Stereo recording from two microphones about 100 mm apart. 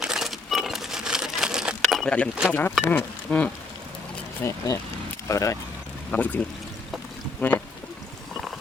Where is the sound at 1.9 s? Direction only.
5° left (ahead or behind).